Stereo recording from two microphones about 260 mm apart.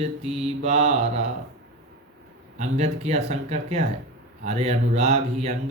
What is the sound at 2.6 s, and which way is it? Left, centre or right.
Speech, right.